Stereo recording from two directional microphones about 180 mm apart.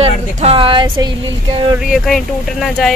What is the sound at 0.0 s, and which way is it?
Speech, 35° right (ahead or behind).